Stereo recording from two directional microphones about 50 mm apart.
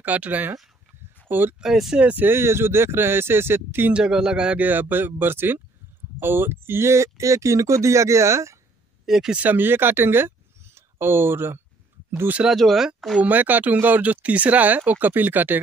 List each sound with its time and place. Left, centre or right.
0.0 s speech: right
1.6 s a man's voice: centre
2.3 s speech: right
3.9 s a man's voice: centre
4.6 s speech: right
6.9 s speech: right
9.0 s speech: centre
9.4 s speech: right
12.4 s speech: centre
13.2 s speech: right